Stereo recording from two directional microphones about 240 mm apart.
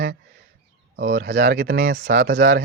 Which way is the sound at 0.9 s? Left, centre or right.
Right.